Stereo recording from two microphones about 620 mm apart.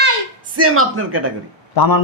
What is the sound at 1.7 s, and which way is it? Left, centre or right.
Speech, left.